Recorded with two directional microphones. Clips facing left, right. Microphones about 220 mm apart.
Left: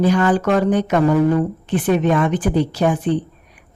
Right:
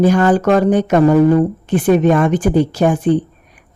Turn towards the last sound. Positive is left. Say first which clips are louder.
# right 4 dB
turn(degrees=-45)  # may be behind; listen again after turning